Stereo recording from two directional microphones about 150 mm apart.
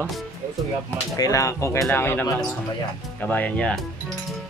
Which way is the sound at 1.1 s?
20° left (ahead or behind).